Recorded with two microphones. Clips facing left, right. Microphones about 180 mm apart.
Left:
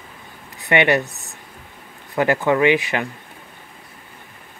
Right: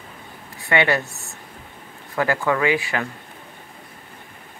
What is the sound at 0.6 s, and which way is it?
Speech, 20° left (ahead or behind).